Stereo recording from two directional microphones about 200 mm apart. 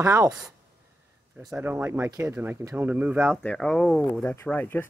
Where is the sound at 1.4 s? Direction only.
10° right (ahead or behind).